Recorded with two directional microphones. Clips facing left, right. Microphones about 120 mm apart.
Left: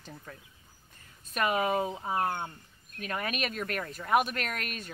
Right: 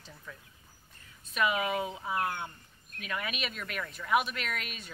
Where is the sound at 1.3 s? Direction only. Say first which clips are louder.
Left 2 dB; 45° left (ahead or behind).